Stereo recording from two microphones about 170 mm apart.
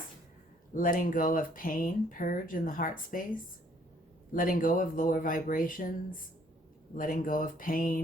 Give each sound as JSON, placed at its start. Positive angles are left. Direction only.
{"t": 0.7, "sound": "speech", "side_deg": 50}
{"t": 4.4, "sound": "speech", "side_deg": 55}